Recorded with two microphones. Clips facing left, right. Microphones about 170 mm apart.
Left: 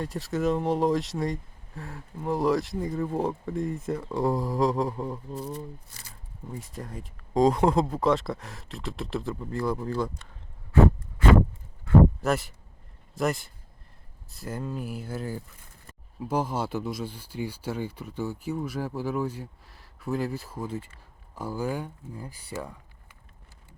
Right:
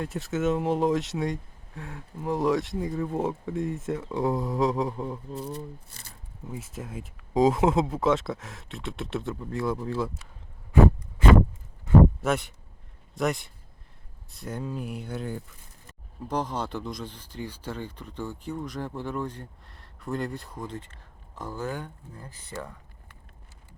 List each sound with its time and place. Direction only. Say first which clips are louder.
0.0 s speech: even; centre (ahead or behind)
12.2 s speech: even; centre (ahead or behind)